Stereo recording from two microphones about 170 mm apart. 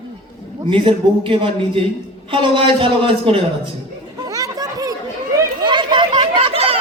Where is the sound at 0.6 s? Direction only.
30° right (ahead or behind).